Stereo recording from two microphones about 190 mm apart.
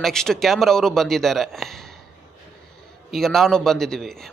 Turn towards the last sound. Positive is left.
turn(degrees=0)  # may be behind; listen again after turning